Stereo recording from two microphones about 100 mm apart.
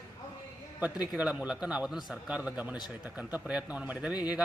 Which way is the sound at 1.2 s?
10° right (ahead or behind).